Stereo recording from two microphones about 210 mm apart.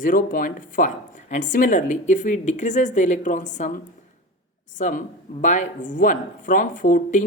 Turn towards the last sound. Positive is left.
turn(degrees=40)  # may be behind; listen again after turning